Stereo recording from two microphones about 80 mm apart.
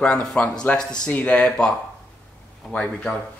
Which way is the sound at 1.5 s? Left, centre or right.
Centre.